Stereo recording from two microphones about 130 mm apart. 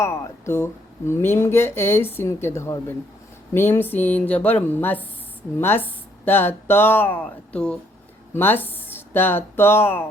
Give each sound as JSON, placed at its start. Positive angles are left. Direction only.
{"t": 0.0, "sound": "speech", "side_deg": 20}